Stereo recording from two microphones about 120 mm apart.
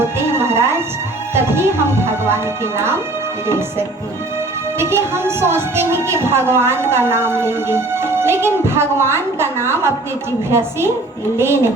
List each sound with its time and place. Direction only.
0.3 s music: 20° right (ahead or behind)
1.3 s a woman's voice: 20° right (ahead or behind)